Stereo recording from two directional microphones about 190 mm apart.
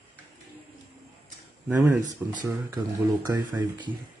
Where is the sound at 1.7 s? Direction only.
15° right (ahead or behind).